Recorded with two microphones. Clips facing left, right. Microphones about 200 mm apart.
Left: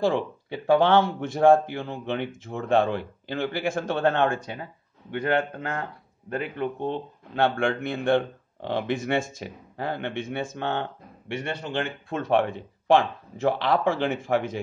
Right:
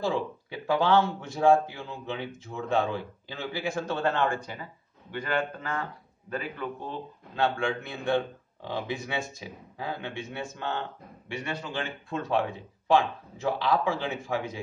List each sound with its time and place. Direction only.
0.7 s speech: 55° left (ahead or behind); by 9.1 s 80° left
9.1 s speech: 60° left (ahead or behind)